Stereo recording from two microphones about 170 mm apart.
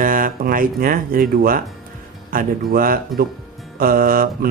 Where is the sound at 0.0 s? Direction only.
55° right (ahead or behind).